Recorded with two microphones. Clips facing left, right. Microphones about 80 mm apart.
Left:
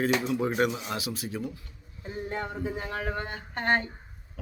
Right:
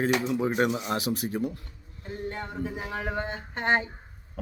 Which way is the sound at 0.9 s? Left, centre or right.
Right.